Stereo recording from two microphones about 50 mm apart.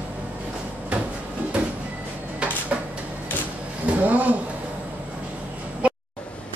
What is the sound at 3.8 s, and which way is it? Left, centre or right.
Speech, right.